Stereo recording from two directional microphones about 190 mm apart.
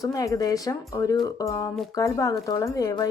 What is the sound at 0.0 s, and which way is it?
A woman's voice, 20° left (ahead or behind).